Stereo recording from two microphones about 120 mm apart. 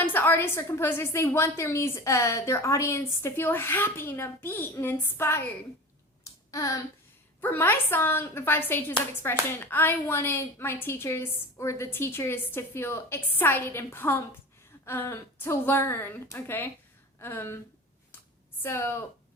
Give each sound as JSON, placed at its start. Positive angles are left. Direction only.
{"t": 0.0, "sound": "a woman's voice", "side_deg": 15}
{"t": 6.5, "sound": "a sound", "side_deg": 25}
{"t": 7.4, "sound": "a woman's voice", "side_deg": 15}
{"t": 18.6, "sound": "a woman's voice", "side_deg": 20}